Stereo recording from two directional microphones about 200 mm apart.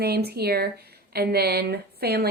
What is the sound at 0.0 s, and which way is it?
Speech, 50° right (ahead or behind).